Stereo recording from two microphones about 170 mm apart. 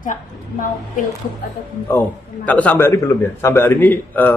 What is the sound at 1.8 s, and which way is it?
A man's voice, 10° left (ahead or behind).